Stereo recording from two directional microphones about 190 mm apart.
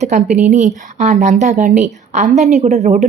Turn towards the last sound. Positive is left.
turn(degrees=-35)  # may be behind; listen again after turning